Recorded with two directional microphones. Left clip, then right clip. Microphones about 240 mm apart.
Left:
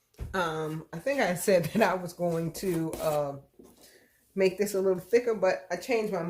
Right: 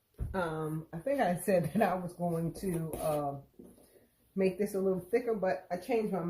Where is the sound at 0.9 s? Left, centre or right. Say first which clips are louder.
Left 3 dB; left.